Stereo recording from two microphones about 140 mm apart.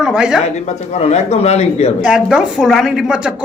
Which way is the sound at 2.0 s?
5° right (ahead or behind).